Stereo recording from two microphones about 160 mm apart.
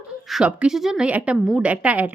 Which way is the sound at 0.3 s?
5° right (ahead or behind).